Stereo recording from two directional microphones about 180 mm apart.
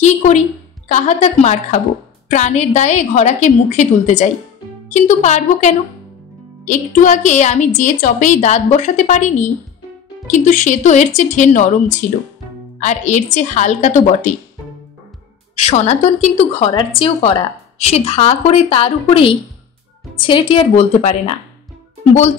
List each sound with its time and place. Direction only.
0.8 s a woman's voice: 40° left (ahead or behind)
12.8 s a woman's voice: 40° left (ahead or behind)
15.5 s a woman's voice: 40° left (ahead or behind)